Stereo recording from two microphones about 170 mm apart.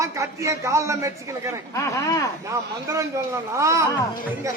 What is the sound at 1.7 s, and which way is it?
Speech, 20° left (ahead or behind).